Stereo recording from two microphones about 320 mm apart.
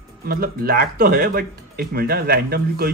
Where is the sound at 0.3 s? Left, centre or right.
Right.